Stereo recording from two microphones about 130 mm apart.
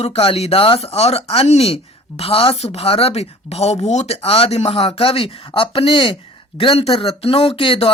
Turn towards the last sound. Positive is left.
turn(degrees=45)  # may be behind; listen again after turning